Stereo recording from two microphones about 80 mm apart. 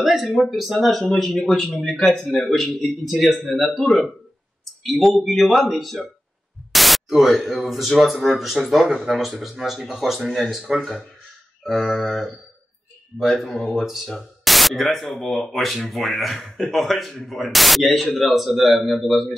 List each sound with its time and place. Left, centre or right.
0.0 s speech: centre
13.6 s speech: centre